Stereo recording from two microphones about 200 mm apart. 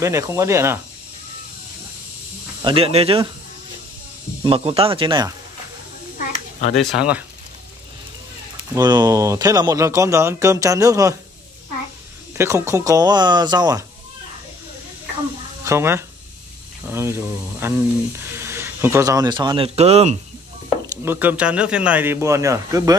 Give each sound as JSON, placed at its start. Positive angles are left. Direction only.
{"t": 0.0, "sound": "speech", "side_deg": -15}
{"t": 2.6, "sound": "speech", "side_deg": -25}
{"t": 4.4, "sound": "speech", "side_deg": -25}
{"t": 6.7, "sound": "speech", "side_deg": 0}
{"t": 8.7, "sound": "speech", "side_deg": -20}
{"t": 12.4, "sound": "speech", "side_deg": -15}
{"t": 15.6, "sound": "speech", "side_deg": -15}
{"t": 21.0, "sound": "speech", "side_deg": -10}